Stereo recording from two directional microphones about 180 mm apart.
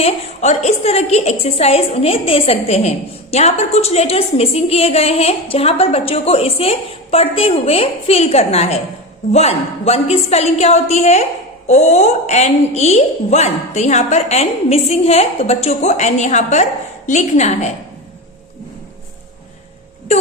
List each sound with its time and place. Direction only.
0.0 s a woman's voice: 35° left (ahead or behind)